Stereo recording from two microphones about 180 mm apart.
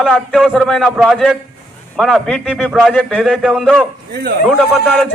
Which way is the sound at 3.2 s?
5° right (ahead or behind).